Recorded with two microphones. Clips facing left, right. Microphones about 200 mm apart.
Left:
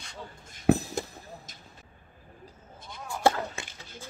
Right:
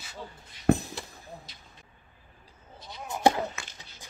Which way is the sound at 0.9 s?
45° left (ahead or behind).